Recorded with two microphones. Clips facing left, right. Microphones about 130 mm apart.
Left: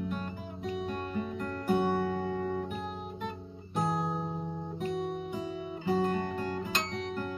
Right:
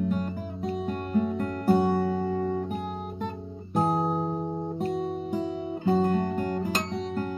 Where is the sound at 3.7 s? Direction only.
40° right (ahead or behind).